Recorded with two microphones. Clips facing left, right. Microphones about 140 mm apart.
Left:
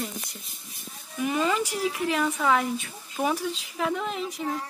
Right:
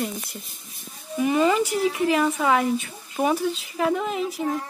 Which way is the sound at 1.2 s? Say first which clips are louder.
Right 5 dB; 5° right (ahead or behind).